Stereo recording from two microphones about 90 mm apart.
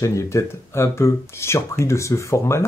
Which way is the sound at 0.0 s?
35° left (ahead or behind).